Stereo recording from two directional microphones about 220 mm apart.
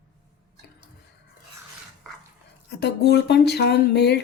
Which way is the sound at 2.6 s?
50° left (ahead or behind).